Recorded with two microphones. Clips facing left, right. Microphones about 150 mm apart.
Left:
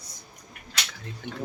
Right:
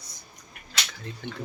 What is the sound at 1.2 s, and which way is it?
Speech, 5° left (ahead or behind).